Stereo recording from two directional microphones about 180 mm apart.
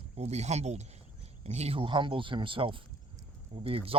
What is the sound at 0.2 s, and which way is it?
Speech, 35° right (ahead or behind).